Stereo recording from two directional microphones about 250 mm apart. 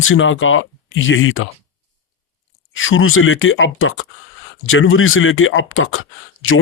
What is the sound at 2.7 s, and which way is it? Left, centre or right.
Speech, left.